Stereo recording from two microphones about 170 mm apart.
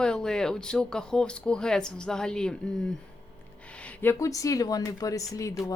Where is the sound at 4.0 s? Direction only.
15° left (ahead or behind).